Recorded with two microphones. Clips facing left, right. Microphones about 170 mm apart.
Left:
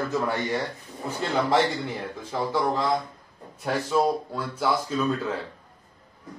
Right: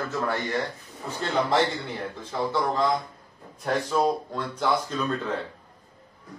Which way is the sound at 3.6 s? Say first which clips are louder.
Even; 5° left (ahead or behind).